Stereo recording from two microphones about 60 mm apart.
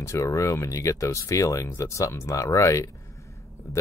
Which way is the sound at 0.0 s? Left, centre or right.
Left.